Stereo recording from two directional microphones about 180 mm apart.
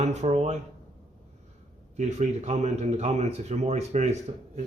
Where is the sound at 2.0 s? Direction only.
40° right (ahead or behind).